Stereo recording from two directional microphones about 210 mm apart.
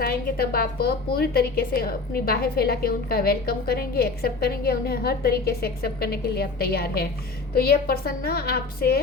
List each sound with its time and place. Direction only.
0.0 s a woman's voice: 45° left (ahead or behind)